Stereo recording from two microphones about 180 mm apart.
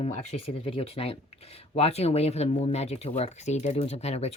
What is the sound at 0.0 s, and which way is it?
Speech, 40° left (ahead or behind).